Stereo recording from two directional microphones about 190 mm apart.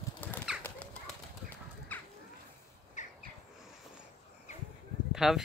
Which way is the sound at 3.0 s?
40° left (ahead or behind).